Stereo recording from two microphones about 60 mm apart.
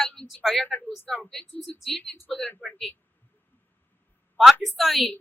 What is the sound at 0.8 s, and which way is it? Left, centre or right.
Speech, left.